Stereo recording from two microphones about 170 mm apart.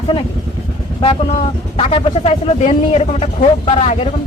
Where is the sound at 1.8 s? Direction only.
30° left (ahead or behind).